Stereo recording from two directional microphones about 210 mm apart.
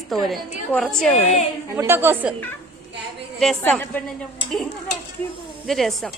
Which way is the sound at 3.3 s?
5° left (ahead or behind).